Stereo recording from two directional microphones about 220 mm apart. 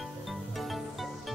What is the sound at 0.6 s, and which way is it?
Music, centre (ahead or behind).